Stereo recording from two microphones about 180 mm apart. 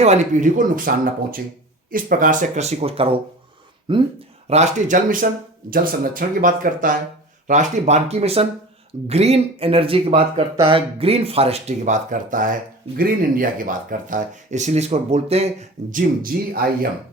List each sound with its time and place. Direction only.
0.0 s speech: 40° right (ahead or behind); by 4.0 s 25° right (ahead or behind)
4.4 s speech: 40° right (ahead or behind)